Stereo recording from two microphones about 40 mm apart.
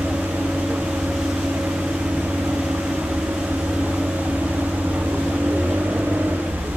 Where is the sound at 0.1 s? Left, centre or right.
Right.